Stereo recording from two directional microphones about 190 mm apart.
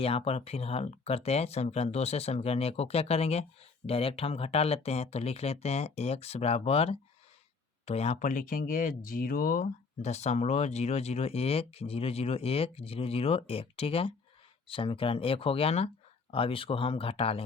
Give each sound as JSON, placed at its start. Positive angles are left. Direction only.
{"t": 0.0, "sound": "speech", "side_deg": 30}